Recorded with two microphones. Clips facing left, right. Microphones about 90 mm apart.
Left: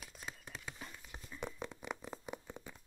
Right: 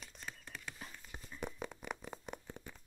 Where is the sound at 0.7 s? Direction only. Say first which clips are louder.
Even; 5° left (ahead or behind).